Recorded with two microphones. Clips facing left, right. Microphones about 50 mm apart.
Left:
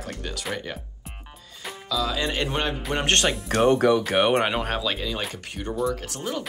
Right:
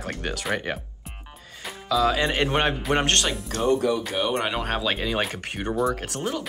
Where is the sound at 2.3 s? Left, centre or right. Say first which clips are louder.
Right 4 dB; right.